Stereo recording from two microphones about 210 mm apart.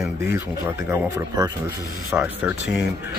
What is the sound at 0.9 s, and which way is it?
Speech, 15° right (ahead or behind).